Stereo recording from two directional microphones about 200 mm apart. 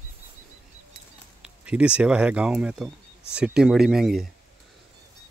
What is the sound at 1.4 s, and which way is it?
Speech, 5° right (ahead or behind).